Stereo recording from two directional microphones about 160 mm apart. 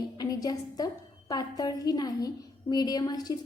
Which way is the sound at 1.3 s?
25° left (ahead or behind).